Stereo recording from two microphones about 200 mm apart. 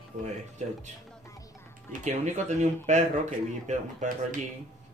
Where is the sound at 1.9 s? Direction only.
35° right (ahead or behind).